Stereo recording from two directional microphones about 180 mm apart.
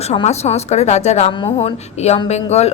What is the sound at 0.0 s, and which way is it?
A woman's voice, 35° left (ahead or behind).